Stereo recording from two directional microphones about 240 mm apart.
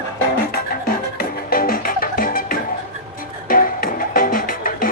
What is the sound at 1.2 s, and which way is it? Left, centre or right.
Music, left.